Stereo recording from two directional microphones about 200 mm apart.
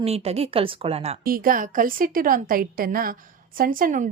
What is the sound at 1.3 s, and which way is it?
Speech, 45° right (ahead or behind).